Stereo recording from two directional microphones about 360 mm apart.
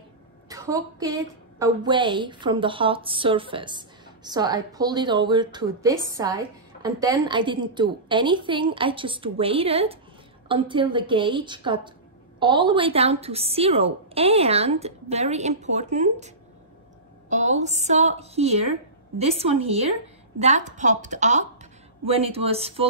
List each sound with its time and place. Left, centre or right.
0.5 s a woman's voice: centre